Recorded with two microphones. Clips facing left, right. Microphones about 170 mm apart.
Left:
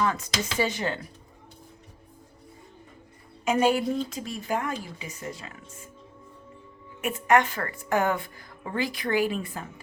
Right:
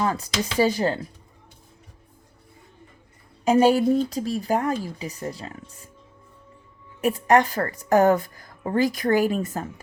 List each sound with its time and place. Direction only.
0.0 s a woman's voice: 35° right (ahead or behind)
3.4 s a woman's voice: 35° right (ahead or behind)
7.0 s a woman's voice: 35° right (ahead or behind)